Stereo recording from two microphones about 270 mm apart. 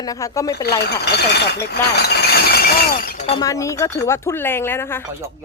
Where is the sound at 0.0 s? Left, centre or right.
Centre.